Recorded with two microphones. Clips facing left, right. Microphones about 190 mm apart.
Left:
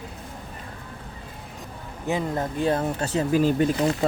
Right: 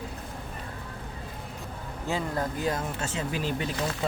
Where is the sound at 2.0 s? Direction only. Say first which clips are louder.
Left 4 dB; 20° left (ahead or behind); by 4.1 s 45° left (ahead or behind).